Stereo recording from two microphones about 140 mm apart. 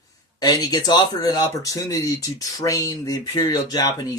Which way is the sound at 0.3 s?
30° left (ahead or behind).